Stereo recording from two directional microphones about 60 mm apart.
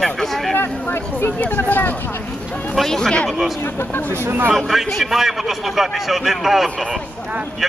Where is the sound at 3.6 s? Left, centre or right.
Left.